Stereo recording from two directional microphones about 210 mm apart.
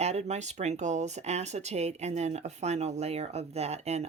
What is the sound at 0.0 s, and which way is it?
Speech, 30° right (ahead or behind).